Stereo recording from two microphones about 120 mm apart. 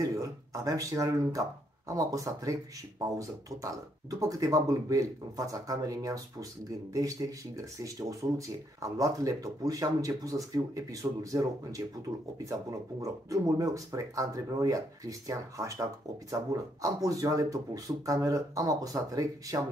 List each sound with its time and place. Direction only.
0.0 s speech: 25° right (ahead or behind)
13.0 s speech: 30° right (ahead or behind)